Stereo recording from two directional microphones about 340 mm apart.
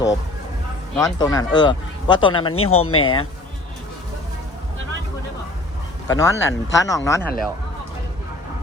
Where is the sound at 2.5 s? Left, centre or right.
Left.